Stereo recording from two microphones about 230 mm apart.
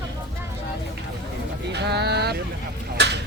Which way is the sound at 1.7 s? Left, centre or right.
Right.